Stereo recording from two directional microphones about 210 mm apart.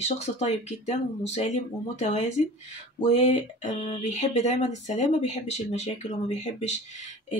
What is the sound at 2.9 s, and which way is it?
Speech, 30° left (ahead or behind).